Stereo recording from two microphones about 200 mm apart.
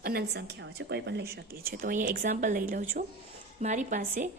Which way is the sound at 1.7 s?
45° right (ahead or behind).